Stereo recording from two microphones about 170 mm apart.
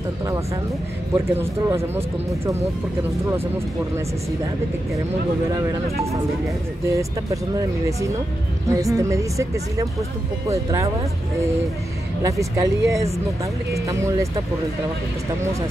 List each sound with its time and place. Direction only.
1.1 s speech: 15° right (ahead or behind)
5.5 s speech: 20° right (ahead or behind)
8.6 s speech: 20° right (ahead or behind)
12.2 s speech: 20° right (ahead or behind)